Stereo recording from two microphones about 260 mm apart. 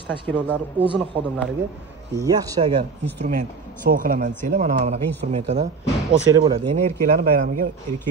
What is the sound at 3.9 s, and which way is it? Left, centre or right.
Speech, right.